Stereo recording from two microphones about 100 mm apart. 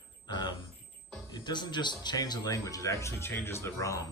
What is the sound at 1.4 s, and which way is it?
Speech, 45° left (ahead or behind).